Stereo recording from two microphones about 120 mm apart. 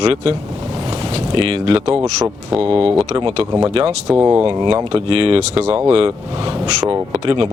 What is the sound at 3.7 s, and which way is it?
Speech, 55° right (ahead or behind).